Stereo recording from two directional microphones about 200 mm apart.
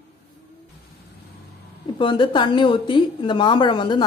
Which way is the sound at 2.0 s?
25° left (ahead or behind).